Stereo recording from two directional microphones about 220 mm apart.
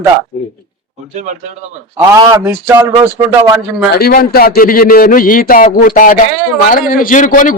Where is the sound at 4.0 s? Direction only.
45° left (ahead or behind).